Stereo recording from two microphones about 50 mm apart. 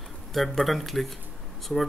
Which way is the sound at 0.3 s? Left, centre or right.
Centre.